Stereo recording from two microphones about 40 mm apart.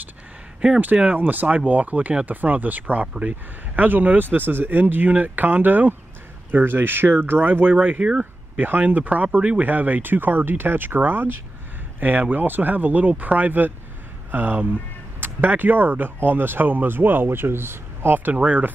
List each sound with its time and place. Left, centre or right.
0.6 s speech: right
6.5 s speech: right
8.0 s speech: right
8.5 s speech: right
8.8 s speech: right
12.0 s speech: right
18.3 s speech: right